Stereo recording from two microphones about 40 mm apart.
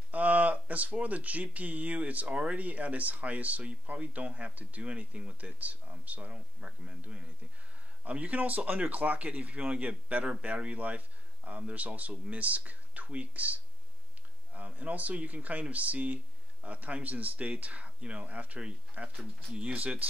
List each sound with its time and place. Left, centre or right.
0.1 s speech: right
6.3 s speech: right